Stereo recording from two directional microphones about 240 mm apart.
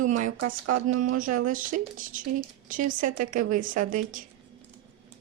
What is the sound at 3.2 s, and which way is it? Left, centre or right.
Speech, right.